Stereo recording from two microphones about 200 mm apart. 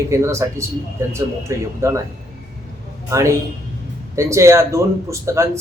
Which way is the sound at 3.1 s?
15° right (ahead or behind).